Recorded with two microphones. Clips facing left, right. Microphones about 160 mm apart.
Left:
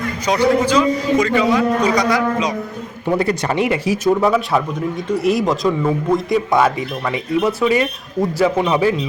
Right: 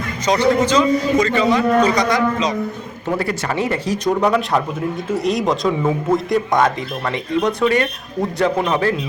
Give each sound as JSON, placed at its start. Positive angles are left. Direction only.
{"t": 0.3, "sound": "a man's voice", "side_deg": 10}
{"t": 3.2, "sound": "a man's voice", "side_deg": 20}